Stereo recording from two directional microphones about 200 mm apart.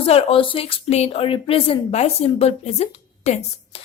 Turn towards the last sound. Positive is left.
turn(degrees=35)  # may be behind; listen again after turning